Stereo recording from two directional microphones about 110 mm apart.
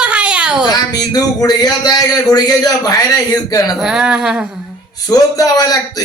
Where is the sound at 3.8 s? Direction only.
5° right (ahead or behind).